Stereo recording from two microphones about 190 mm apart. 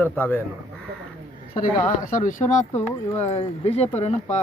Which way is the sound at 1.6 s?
45° left (ahead or behind).